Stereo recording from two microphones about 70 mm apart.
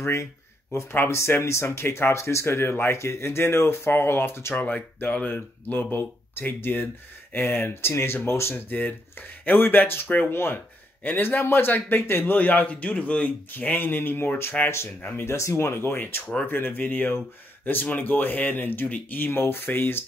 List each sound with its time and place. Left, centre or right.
0.0 s speech: left
4.6 s a man's voice: left
15.2 s a man's voice: left